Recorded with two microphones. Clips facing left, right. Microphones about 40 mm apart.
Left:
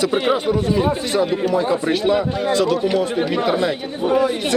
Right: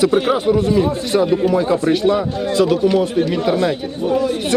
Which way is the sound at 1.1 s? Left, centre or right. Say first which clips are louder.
Right 6 dB; centre.